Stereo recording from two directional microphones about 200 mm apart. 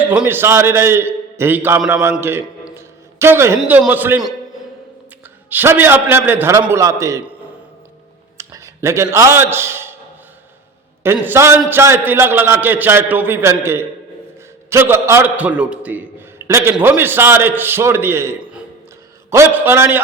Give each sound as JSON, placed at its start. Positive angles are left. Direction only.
{"t": 0.0, "sound": "a man's voice", "side_deg": -10}
{"t": 2.1, "sound": "a sound", "side_deg": -10}
{"t": 3.6, "sound": "a man's voice", "side_deg": -10}
{"t": 5.5, "sound": "a man's voice", "side_deg": -10}
{"t": 8.4, "sound": "a man's voice", "side_deg": -15}
{"t": 11.0, "sound": "a man's voice", "side_deg": -10}